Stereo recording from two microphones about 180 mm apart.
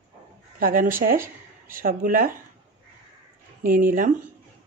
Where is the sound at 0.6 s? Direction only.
50° right (ahead or behind).